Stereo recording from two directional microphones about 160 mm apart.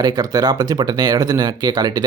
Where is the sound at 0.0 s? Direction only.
25° right (ahead or behind).